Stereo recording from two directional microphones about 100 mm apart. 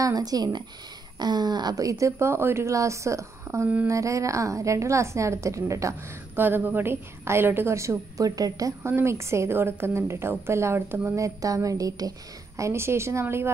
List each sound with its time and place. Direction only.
0.0 s speech: 40° right (ahead or behind)
6.3 s a woman's voice: 20° right (ahead or behind)